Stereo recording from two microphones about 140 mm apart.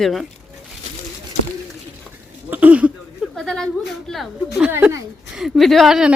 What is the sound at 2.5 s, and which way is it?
Speech, 10° right (ahead or behind).